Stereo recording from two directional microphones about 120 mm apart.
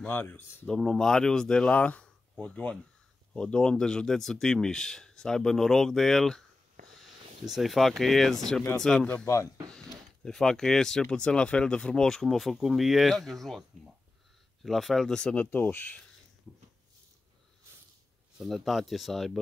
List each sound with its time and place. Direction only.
0.0 s speech: 15° left (ahead or behind)
0.7 s speech: 5° left (ahead or behind)
7.4 s speech: centre (ahead or behind); by 16.0 s 15° left (ahead or behind)
18.4 s speech: centre (ahead or behind)